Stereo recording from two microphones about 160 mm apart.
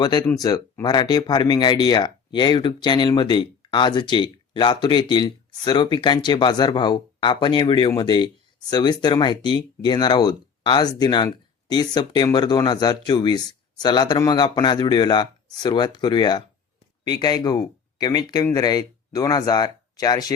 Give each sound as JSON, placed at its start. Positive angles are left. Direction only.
{"t": 0.0, "sound": "speech", "side_deg": 25}